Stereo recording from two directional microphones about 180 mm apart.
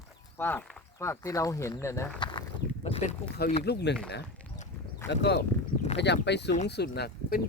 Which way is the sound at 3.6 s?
65° left (ahead or behind).